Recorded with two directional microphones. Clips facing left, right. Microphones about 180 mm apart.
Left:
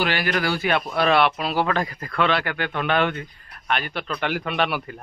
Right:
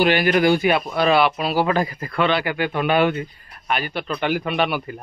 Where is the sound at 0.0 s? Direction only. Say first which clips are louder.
Right 7 dB; 20° right (ahead or behind).